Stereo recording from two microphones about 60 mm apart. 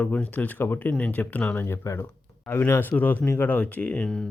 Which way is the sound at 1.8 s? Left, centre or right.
Left.